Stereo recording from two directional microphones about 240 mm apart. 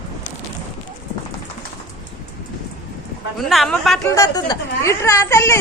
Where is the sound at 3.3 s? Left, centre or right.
Centre.